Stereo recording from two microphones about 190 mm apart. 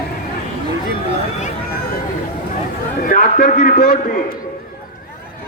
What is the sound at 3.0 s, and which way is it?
Speech, 45° left (ahead or behind).